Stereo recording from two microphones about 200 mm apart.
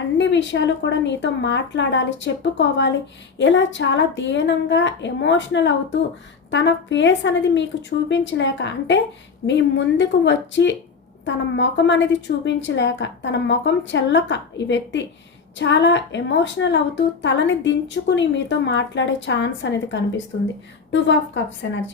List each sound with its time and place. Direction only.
0.2 s a woman's voice: 65° left (ahead or behind)